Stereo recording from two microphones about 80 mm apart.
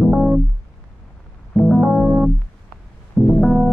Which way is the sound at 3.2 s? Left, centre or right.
Left.